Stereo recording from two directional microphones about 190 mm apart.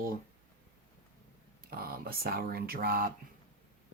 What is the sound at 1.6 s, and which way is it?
Speech, 50° right (ahead or behind).